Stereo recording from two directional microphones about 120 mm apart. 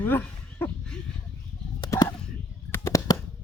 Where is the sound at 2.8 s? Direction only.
25° left (ahead or behind).